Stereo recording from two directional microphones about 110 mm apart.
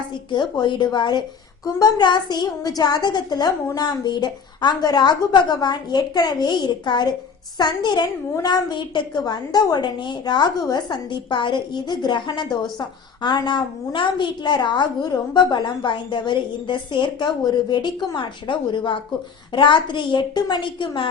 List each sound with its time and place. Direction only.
0.1 s a woman's voice: 45° left (ahead or behind)